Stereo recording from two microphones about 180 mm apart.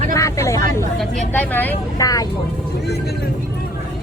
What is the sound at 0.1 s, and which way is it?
Speech, 15° left (ahead or behind).